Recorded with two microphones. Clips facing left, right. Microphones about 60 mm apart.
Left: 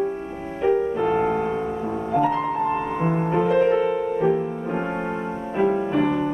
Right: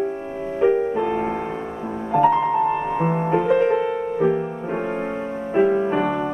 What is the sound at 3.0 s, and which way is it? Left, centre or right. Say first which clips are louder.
Music: right 1 dB; centre.